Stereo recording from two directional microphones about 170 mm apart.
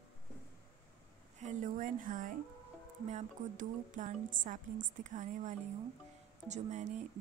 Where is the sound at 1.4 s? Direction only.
45° right (ahead or behind).